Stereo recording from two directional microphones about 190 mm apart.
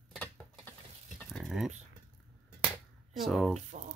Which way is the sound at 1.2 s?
Centre (ahead or behind).